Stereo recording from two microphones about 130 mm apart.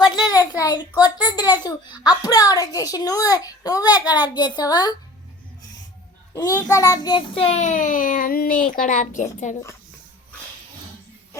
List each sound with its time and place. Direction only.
0.0 s a child's voice: 30° left (ahead or behind)
6.3 s a child's voice: 25° left (ahead or behind); by 9.6 s 75° left (ahead or behind)